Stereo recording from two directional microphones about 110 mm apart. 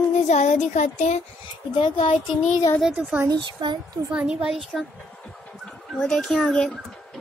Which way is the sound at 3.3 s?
40° right (ahead or behind).